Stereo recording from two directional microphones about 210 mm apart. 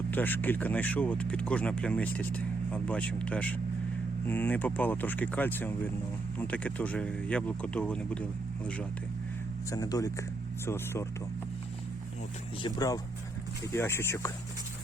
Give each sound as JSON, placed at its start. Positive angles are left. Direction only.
{"t": 0.1, "sound": "speech", "side_deg": 10}
{"t": 9.7, "sound": "speech", "side_deg": 15}
{"t": 12.6, "sound": "speech", "side_deg": 20}